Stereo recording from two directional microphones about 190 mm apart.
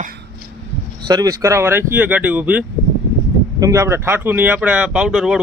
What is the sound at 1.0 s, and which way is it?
Speech, 20° right (ahead or behind).